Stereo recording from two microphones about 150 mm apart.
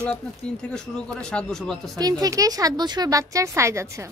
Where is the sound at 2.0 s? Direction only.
25° right (ahead or behind).